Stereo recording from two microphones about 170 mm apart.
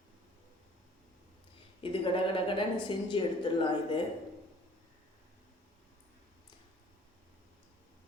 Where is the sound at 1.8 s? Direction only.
30° left (ahead or behind).